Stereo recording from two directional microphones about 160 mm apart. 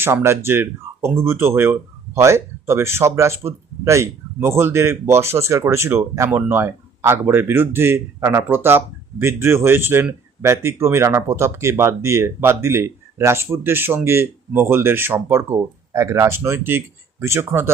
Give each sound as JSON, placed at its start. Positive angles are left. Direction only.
{"t": 0.0, "sound": "speech", "side_deg": -15}